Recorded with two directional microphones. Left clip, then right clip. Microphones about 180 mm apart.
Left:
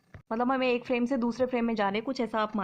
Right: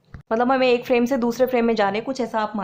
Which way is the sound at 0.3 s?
20° left (ahead or behind).